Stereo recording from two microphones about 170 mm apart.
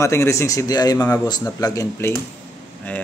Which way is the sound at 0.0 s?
15° left (ahead or behind).